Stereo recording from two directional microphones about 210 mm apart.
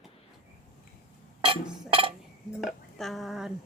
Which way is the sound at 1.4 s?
25° right (ahead or behind).